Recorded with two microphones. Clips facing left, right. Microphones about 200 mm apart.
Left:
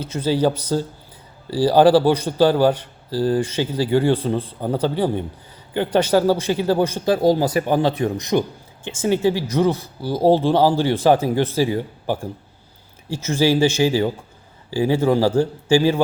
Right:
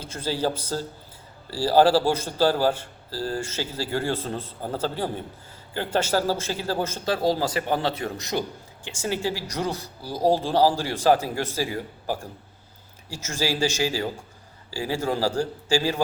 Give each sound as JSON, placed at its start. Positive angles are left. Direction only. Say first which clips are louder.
{"t": 0.2, "sound": "a man's voice", "louder": "left 7 dB", "side_deg": 15}
{"t": 10.1, "sound": "speech", "louder": "left 7 dB", "side_deg": 60}
{"t": 10.8, "sound": "speech", "louder": "left 5 dB", "side_deg": 20}
{"t": 13.1, "sound": "a man's voice", "louder": "left 9 dB", "side_deg": 15}